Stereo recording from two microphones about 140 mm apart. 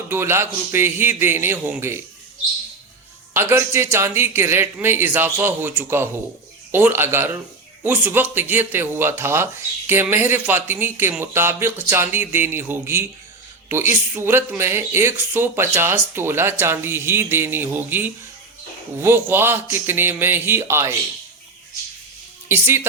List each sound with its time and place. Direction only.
0.1 s speech: 20° right (ahead or behind)
3.3 s speech: 15° right (ahead or behind)
22.4 s speech: 15° right (ahead or behind)